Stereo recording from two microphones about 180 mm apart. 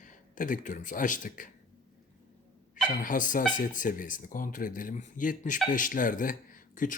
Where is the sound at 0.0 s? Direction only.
45° left (ahead or behind).